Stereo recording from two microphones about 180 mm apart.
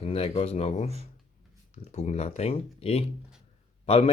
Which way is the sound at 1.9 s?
40° left (ahead or behind).